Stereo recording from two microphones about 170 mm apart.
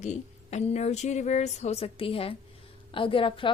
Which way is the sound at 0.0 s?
45° left (ahead or behind).